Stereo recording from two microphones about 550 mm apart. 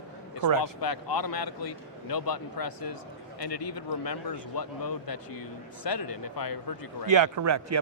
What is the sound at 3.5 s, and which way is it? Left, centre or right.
Speech, left.